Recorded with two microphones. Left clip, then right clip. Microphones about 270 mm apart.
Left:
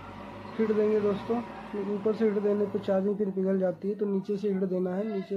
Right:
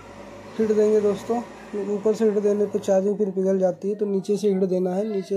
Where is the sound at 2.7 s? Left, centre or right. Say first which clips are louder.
Right 7 dB; centre.